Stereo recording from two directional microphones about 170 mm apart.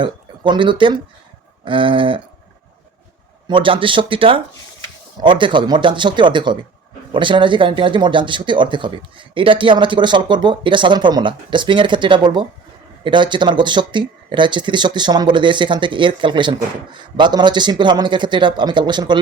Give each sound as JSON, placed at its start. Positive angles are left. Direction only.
{"t": 0.0, "sound": "speech", "side_deg": -30}
{"t": 3.4, "sound": "speech", "side_deg": -30}